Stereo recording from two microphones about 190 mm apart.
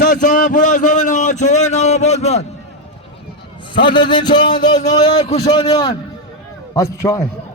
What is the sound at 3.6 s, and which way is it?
A man's voice, 25° left (ahead or behind).